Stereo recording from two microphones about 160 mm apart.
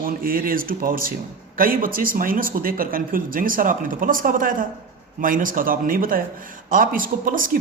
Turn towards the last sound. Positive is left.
turn(degrees=-60)  # may be behind; listen again after turning